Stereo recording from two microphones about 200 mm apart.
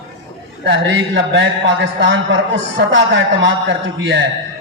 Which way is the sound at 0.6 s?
65° right (ahead or behind).